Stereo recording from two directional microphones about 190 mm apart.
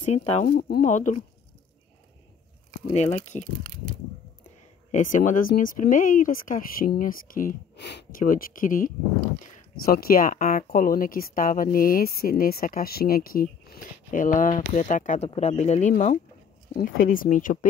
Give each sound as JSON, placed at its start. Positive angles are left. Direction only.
{"t": 0.0, "sound": "speech", "side_deg": 35}
{"t": 0.5, "sound": "speech", "side_deg": 55}
{"t": 0.8, "sound": "speech", "side_deg": 40}
{"t": 4.9, "sound": "speech", "side_deg": 45}